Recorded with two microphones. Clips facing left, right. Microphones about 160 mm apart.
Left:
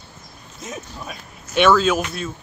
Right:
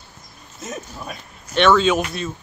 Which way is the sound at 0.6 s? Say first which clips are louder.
Right 1 dB; centre (ahead or behind).